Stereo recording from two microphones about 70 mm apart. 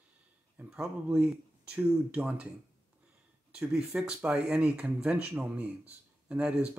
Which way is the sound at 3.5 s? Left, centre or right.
Centre.